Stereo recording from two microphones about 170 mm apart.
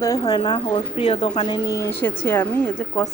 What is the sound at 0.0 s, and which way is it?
A woman's voice, 20° left (ahead or behind).